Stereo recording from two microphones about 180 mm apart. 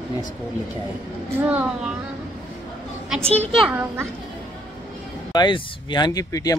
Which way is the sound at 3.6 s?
10° right (ahead or behind).